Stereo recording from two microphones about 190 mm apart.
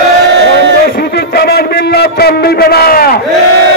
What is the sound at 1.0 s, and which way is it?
A man's voice, 60° left (ahead or behind).